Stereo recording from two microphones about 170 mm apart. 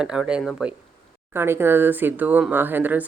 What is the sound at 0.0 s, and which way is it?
Speech, 5° right (ahead or behind).